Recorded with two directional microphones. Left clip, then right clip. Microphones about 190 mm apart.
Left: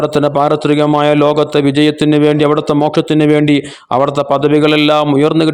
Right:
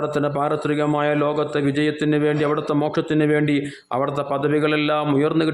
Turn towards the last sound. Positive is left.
turn(degrees=35)  # may be behind; listen again after turning